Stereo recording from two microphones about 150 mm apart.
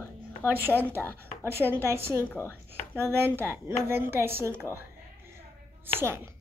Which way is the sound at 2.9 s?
15° right (ahead or behind).